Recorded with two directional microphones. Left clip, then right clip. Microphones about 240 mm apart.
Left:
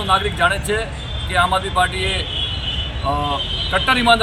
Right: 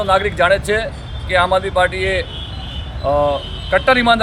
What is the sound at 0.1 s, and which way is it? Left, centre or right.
A man's voice, right.